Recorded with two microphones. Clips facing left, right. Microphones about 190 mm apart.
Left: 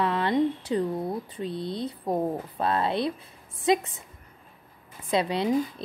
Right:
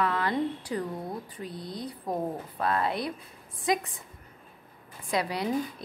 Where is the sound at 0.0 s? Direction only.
25° left (ahead or behind).